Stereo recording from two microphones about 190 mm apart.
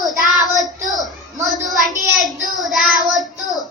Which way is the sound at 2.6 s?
Centre (ahead or behind).